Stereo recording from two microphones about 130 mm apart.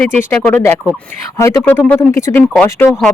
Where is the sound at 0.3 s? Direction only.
15° left (ahead or behind).